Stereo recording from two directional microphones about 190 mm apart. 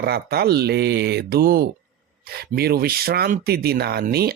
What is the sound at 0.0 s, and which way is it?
Speech, 55° right (ahead or behind).